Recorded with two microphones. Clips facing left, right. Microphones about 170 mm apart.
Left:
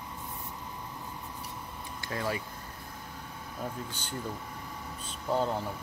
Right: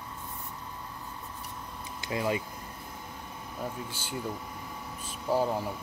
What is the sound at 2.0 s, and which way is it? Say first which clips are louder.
Speech: right 4 dB; 15° right (ahead or behind).